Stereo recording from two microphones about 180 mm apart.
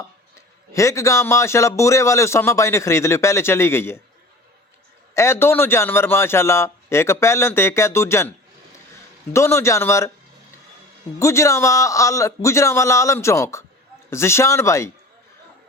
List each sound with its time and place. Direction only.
0.7 s a man's voice: 15° left (ahead or behind)
5.1 s a man's voice: 15° left (ahead or behind)
9.3 s a man's voice: 15° left (ahead or behind)
11.2 s a man's voice: 15° left (ahead or behind)